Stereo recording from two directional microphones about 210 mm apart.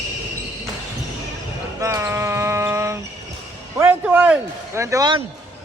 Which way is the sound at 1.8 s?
15° right (ahead or behind).